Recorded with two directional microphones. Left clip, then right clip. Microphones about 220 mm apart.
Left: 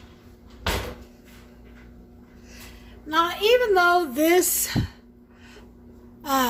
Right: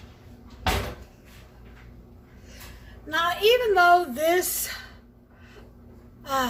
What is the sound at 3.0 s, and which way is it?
Speech, 45° left (ahead or behind).